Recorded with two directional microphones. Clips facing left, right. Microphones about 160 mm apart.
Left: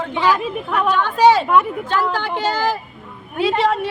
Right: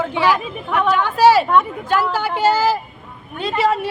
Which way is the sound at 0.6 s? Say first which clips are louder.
Right 2 dB; 10° left (ahead or behind).